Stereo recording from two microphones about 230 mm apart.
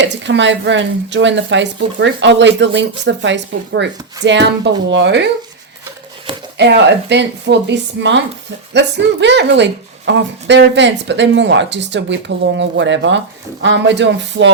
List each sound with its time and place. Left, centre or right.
0.0 s a woman's voice: right
6.6 s a woman's voice: right